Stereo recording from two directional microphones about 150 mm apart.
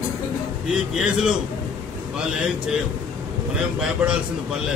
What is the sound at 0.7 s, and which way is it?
A man's voice, 5° right (ahead or behind).